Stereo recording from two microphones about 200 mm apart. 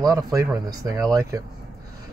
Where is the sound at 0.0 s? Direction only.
20° right (ahead or behind).